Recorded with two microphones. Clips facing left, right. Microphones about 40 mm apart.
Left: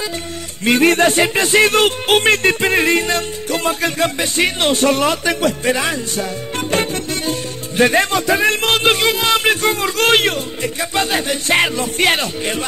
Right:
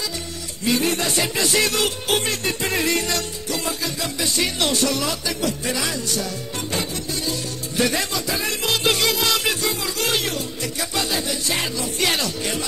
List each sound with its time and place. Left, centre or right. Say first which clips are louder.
0.7 s music: left 9 dB; left
6.7 s speech: left 8 dB; left
10.6 s music: left 7 dB; left